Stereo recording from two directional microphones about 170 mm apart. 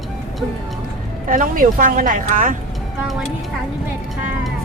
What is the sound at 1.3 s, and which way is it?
A woman's voice, 50° right (ahead or behind).